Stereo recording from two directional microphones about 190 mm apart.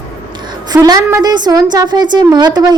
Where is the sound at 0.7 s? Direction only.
20° right (ahead or behind).